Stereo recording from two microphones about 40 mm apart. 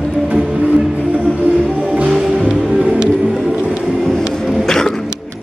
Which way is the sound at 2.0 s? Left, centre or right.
Centre.